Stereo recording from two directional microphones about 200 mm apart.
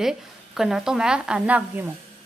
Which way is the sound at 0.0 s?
Centre (ahead or behind).